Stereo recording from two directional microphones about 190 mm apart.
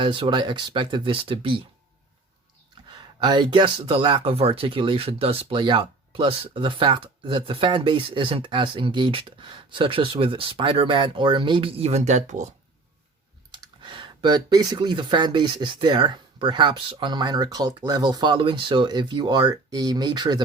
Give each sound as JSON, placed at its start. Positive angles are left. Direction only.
{"t": 0.0, "sound": "speech", "side_deg": -25}
{"t": 3.2, "sound": "speech", "side_deg": -25}
{"t": 13.5, "sound": "speech", "side_deg": -25}